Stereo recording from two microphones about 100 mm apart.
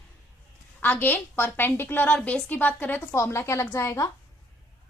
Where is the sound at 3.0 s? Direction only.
30° left (ahead or behind).